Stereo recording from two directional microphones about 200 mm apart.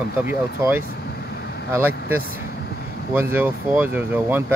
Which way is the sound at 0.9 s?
55° left (ahead or behind).